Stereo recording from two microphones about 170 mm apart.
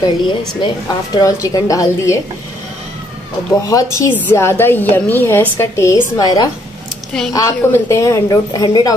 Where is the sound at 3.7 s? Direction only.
15° left (ahead or behind).